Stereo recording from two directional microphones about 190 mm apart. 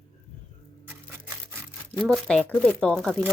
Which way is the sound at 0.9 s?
10° right (ahead or behind).